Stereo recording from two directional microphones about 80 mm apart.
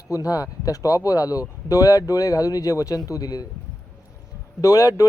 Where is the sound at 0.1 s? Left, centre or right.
Left.